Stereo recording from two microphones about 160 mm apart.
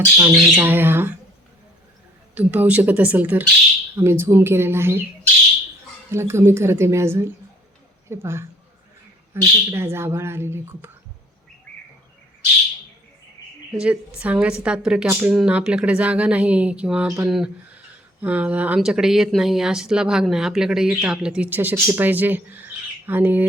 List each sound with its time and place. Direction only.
0.2 s a woman's voice: 10° right (ahead or behind)
2.3 s a woman's voice: 10° right (ahead or behind)
6.1 s a woman's voice: 15° right (ahead or behind)
13.7 s a woman's voice: 5° right (ahead or behind)